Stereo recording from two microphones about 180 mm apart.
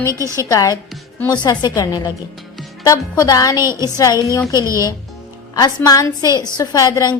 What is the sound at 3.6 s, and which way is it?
Speech, 15° right (ahead or behind).